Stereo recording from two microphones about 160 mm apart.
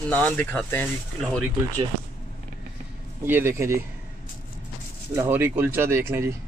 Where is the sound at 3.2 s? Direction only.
15° right (ahead or behind).